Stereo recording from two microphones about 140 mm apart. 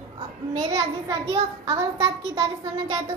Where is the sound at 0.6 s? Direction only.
25° right (ahead or behind).